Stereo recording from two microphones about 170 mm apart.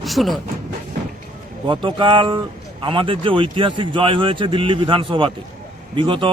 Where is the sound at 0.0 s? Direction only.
Centre (ahead or behind).